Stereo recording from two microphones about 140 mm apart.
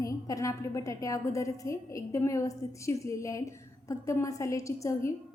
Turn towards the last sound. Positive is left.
turn(degrees=20)  # may be behind; listen again after turning